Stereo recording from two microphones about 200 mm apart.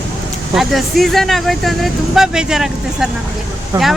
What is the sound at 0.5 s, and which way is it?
Speech, centre (ahead or behind).